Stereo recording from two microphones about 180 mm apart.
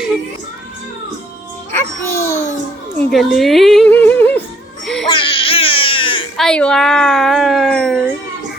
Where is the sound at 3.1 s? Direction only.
Centre (ahead or behind).